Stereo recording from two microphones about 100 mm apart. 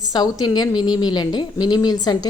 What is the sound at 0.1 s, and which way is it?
A woman's voice, 45° left (ahead or behind).